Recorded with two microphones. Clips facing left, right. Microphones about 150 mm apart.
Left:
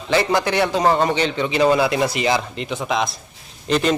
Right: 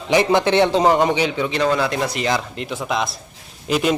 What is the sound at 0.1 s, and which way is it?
A man's voice, 20° right (ahead or behind).